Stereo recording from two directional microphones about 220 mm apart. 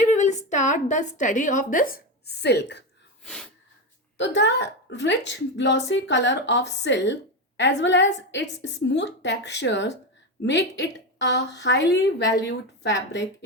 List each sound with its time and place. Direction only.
0.1 s a woman's voice: 35° left (ahead or behind); by 2.8 s 50° left (ahead or behind)
4.2 s a woman's voice: 55° left (ahead or behind)